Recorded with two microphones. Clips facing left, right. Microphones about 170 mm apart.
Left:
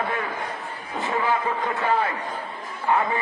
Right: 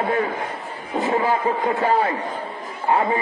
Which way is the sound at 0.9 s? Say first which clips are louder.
Right 6 dB; 20° right (ahead or behind).